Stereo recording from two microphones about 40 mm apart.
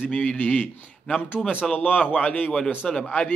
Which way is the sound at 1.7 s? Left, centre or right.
Left.